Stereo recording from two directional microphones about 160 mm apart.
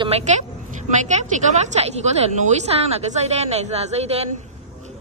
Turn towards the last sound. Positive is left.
turn(degrees=-40)  # may be behind; listen again after turning